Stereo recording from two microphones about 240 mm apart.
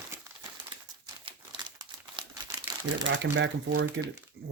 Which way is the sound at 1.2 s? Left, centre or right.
Centre.